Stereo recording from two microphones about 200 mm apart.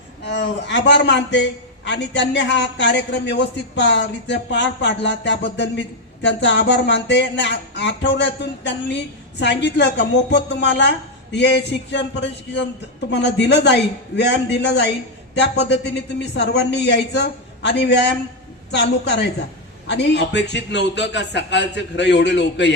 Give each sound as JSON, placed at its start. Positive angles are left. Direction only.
{"t": 0.3, "sound": "speech", "side_deg": 60}
{"t": 16.3, "sound": "speech", "side_deg": 60}